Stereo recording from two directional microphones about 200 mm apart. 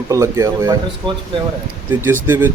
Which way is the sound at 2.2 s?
10° right (ahead or behind).